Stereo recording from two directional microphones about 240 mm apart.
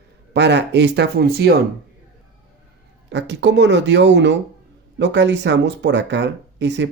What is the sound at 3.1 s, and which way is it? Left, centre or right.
Speech, right.